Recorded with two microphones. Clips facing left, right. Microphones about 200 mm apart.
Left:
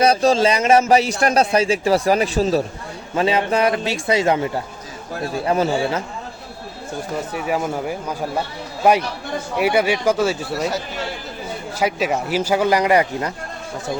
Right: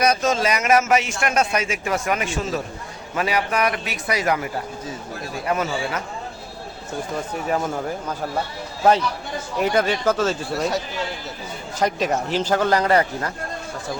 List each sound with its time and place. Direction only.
0.0 s a man's voice: 30° left (ahead or behind)
7.3 s speech: 10° left (ahead or behind)
9.6 s speech: 10° left (ahead or behind)
10.5 s speech: centre (ahead or behind)
11.8 s speech: 5° left (ahead or behind)